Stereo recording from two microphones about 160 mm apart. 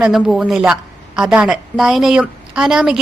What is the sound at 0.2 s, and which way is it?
A woman's voice, centre (ahead or behind).